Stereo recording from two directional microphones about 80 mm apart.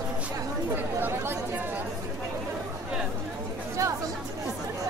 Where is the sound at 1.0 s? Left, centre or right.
Right.